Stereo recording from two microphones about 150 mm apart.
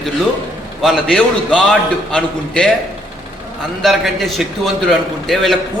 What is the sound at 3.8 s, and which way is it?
A man's voice, centre (ahead or behind).